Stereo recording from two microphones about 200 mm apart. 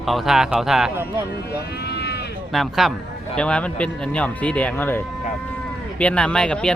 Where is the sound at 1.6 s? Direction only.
55° left (ahead or behind).